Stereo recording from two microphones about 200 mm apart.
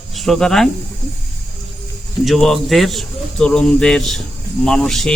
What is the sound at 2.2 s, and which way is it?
A man's voice, centre (ahead or behind).